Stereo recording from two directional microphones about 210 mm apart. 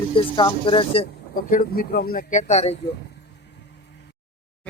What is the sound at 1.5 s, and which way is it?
Speech, 45° left (ahead or behind).